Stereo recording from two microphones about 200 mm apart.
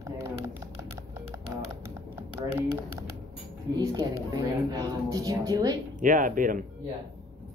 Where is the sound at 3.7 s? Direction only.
20° right (ahead or behind).